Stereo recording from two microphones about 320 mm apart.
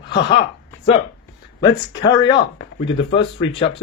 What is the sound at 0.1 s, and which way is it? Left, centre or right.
Speech, centre.